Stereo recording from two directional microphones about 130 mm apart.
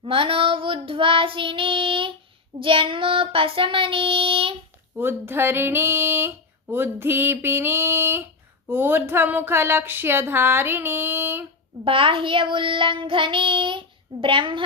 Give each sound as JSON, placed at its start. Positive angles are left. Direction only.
{"t": 0.0, "sound": "child singing", "side_deg": -45}
{"t": 4.9, "sound": "a sound", "side_deg": -15}
{"t": 11.9, "sound": "child singing", "side_deg": -40}